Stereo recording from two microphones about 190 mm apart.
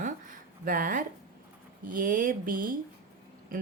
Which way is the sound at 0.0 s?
45° right (ahead or behind).